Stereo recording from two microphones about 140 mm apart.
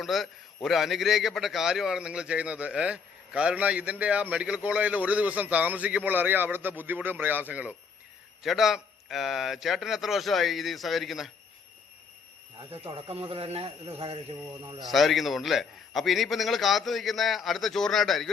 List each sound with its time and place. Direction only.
0.0 s a man's voice: centre (ahead or behind)
12.7 s speech: 45° right (ahead or behind)
14.6 s speech: 35° right (ahead or behind)
14.8 s a man's voice: centre (ahead or behind)